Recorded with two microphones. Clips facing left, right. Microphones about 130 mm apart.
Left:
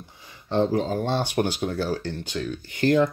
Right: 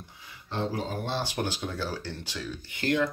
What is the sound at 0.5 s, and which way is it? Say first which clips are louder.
Speech: left 9 dB; 35° left (ahead or behind).